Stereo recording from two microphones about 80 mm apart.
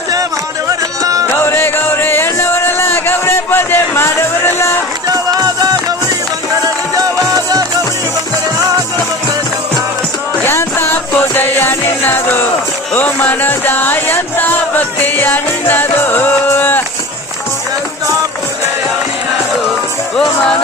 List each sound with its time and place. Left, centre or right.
0.7 s music: right
1.5 s music: left
5.0 s music: right
6.9 s music: right
10.4 s music: left
20.1 s music: centre